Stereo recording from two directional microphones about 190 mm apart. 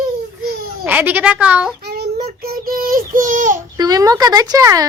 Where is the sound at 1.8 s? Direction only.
55° right (ahead or behind).